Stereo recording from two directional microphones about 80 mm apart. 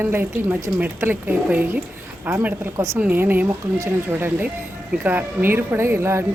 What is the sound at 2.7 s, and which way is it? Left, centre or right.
Speech, right.